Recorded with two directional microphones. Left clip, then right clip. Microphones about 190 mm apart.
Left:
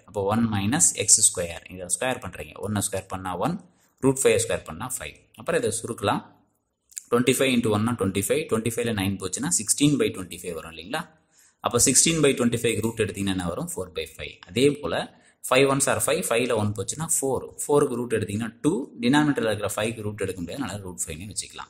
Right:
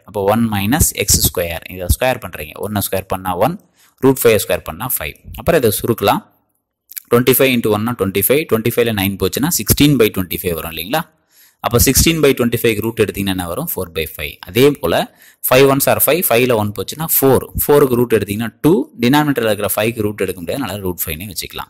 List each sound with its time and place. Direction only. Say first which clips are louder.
0.1 s speech: right 10 dB; 35° right (ahead or behind)